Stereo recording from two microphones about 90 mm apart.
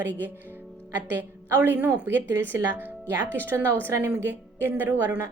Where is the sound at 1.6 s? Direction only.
20° right (ahead or behind).